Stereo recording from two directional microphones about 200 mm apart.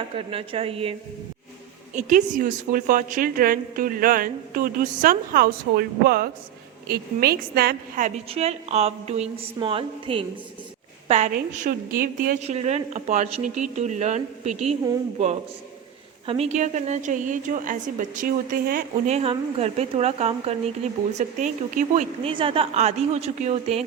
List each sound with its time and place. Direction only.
0.2 s a woman's voice: 30° right (ahead or behind)
1.9 s a woman's voice: 40° right (ahead or behind)
11.3 s a woman's voice: 45° right (ahead or behind)
16.2 s a woman's voice: 30° right (ahead or behind)
22.3 s a woman's voice: 25° right (ahead or behind)